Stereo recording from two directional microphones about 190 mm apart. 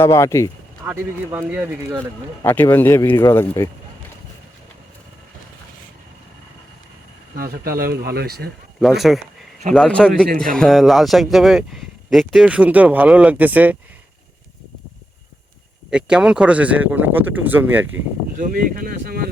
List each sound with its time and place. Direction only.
0.0 s a man's voice: 15° left (ahead or behind)
0.9 s speech: 10° right (ahead or behind)
2.4 s a man's voice: 10° left (ahead or behind)
7.3 s speech: 50° right (ahead or behind)
8.8 s speech: centre (ahead or behind)
15.9 s speech: 5° right (ahead or behind)
18.3 s speech: 45° right (ahead or behind)